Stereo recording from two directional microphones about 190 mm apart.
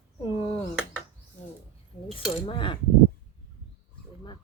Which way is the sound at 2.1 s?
30° left (ahead or behind).